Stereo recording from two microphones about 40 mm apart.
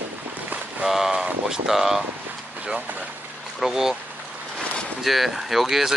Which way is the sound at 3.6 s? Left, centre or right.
Centre.